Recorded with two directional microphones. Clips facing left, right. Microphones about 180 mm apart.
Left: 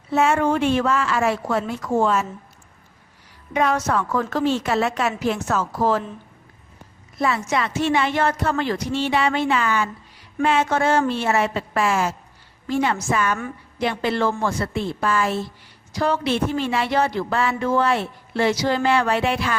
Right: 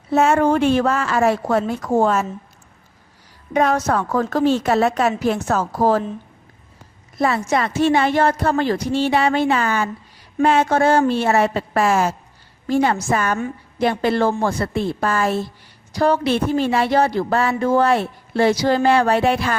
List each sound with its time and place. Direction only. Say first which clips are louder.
0.1 s a woman's voice: right 3 dB; 40° right (ahead or behind)
3.5 s a woman's voice: right 3 dB; 40° right (ahead or behind)
7.2 s a woman's voice: right 3 dB; 40° right (ahead or behind)